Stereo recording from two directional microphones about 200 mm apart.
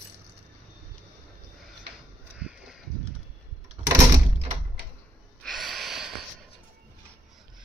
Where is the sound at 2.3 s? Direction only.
5° right (ahead or behind).